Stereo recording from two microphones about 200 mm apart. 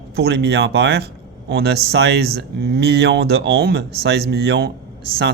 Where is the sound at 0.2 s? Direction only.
55° right (ahead or behind).